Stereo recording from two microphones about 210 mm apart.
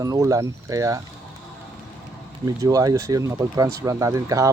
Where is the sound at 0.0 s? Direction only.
15° right (ahead or behind).